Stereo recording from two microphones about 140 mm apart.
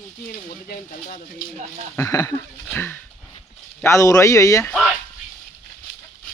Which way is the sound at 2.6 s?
15° left (ahead or behind).